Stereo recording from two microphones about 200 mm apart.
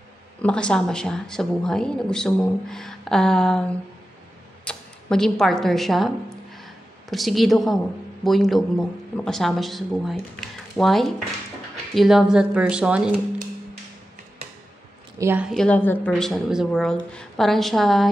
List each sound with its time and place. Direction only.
0.4 s speech: 5° left (ahead or behind)
15.1 s speech: 10° right (ahead or behind)